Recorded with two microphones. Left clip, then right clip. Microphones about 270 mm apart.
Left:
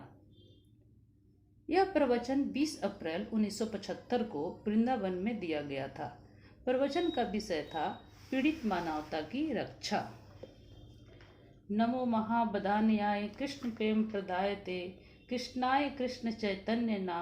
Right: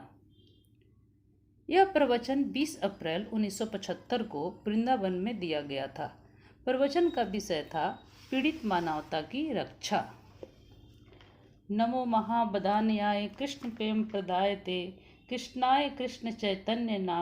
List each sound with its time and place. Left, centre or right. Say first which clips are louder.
1.6 s speech: right 4 dB; right
11.7 s speech: right 4 dB; right